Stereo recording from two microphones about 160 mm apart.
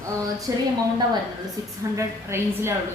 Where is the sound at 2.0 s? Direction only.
15° right (ahead or behind).